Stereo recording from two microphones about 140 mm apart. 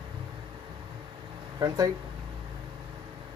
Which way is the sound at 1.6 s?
35° right (ahead or behind).